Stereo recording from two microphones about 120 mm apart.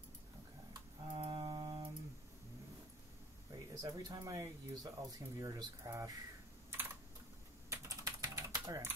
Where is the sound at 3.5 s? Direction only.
30° right (ahead or behind).